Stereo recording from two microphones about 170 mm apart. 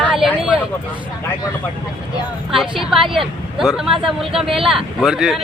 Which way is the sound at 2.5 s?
Centre (ahead or behind).